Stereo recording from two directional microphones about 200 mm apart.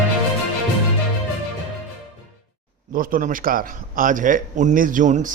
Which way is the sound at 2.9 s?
45° right (ahead or behind).